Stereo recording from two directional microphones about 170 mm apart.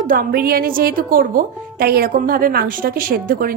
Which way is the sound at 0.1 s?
55° right (ahead or behind).